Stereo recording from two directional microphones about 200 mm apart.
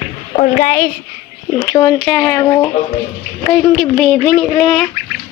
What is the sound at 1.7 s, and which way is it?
Speech, 20° left (ahead or behind).